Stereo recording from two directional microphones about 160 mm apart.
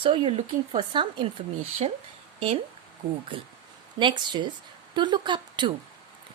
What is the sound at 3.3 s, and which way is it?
A woman's voice, 30° right (ahead or behind).